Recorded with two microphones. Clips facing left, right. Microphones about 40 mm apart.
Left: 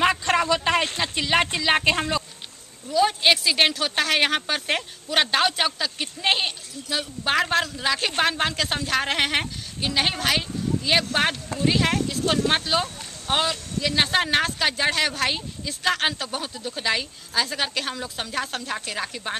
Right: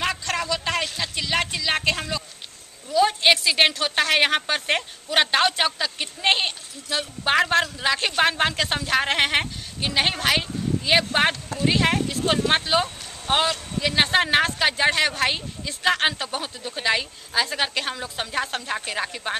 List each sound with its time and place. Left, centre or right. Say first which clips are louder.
0.0 s a sound: left 5 dB; centre
0.9 s speech: left 3 dB; left
2.9 s speech: right 1 dB; centre